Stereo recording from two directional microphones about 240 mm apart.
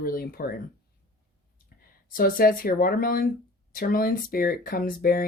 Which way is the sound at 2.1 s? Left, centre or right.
Left.